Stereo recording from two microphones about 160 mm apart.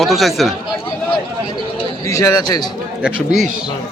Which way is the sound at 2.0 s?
20° left (ahead or behind).